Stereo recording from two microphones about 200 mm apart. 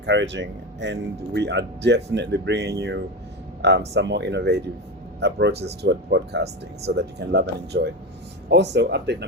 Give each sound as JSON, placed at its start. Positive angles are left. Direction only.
{"t": 0.0, "sound": "speech", "side_deg": -65}